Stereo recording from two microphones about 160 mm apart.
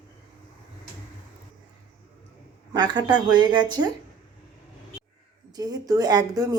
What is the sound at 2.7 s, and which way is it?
Speech, 25° right (ahead or behind).